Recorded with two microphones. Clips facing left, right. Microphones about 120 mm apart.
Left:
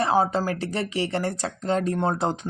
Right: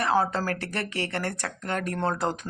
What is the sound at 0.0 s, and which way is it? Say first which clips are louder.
Speech: left 3 dB; 20° left (ahead or behind).